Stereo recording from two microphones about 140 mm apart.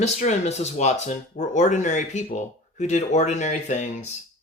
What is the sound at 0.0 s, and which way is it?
Speech, 55° left (ahead or behind).